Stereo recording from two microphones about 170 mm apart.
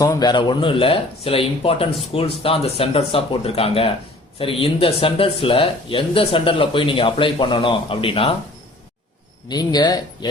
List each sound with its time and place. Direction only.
0.0 s speech: 20° left (ahead or behind)
9.5 s speech: 25° left (ahead or behind)